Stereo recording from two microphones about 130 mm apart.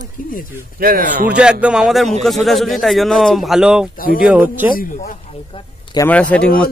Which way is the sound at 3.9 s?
90° left.